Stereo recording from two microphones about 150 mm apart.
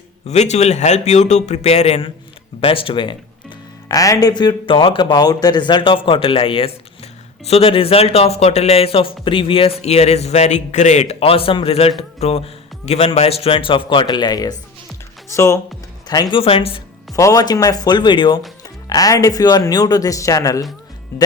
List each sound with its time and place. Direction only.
0.3 s a man's voice: 50° left (ahead or behind)
3.8 s speech: 25° left (ahead or behind)
16.4 s speech: 40° left (ahead or behind)
17.1 s speech: 25° left (ahead or behind)